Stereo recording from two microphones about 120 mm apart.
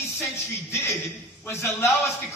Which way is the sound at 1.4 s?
20° left (ahead or behind).